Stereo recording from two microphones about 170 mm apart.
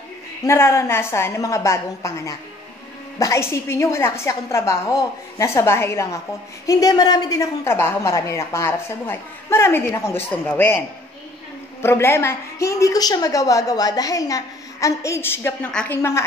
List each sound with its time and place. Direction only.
0.5 s a woman's voice: 15° left (ahead or behind)
11.8 s a woman's voice: 15° left (ahead or behind)